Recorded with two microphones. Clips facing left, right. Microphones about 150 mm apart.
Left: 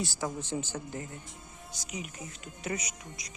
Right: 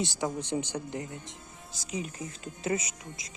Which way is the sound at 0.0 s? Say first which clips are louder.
Right 3 dB; 20° right (ahead or behind).